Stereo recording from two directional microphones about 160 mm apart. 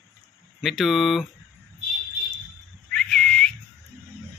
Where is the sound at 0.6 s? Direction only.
Centre (ahead or behind).